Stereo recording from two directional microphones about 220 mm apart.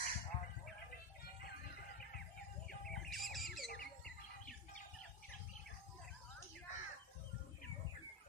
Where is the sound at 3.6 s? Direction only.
45° left (ahead or behind).